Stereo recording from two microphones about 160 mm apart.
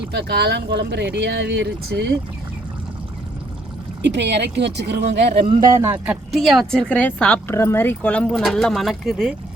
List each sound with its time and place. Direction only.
0.1 s speech: 90° right
4.0 s speech: 90° right
5.5 s speech: 25° right (ahead or behind)
5.9 s speech: 10° right (ahead or behind)